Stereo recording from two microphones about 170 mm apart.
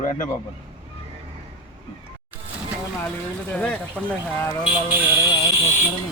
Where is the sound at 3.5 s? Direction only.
5° left (ahead or behind).